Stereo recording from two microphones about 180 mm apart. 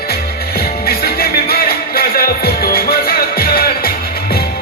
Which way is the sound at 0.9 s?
60° left (ahead or behind).